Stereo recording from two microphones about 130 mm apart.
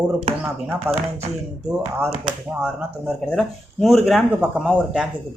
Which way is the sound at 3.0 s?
5° left (ahead or behind).